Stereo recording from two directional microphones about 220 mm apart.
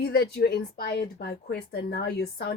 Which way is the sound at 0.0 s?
45° left (ahead or behind).